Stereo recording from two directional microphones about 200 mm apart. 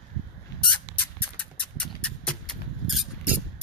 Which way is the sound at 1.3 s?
5° left (ahead or behind).